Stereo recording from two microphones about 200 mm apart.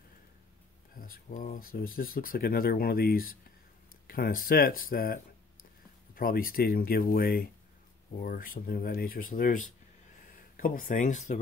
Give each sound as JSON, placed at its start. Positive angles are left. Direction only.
{"t": 0.9, "sound": "speech", "side_deg": 45}